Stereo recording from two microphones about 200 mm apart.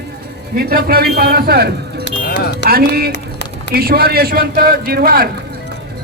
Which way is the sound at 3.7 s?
50° right (ahead or behind).